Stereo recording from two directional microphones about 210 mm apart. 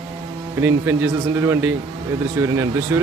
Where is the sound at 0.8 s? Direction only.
10° right (ahead or behind).